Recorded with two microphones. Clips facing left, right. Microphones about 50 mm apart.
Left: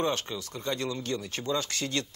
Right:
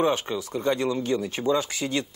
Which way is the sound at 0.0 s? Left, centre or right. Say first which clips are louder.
Right 6 dB; centre.